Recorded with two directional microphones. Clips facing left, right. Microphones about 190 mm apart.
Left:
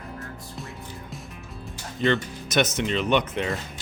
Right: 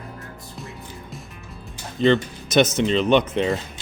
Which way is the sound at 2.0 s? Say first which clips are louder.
Right 5 dB; 30° right (ahead or behind).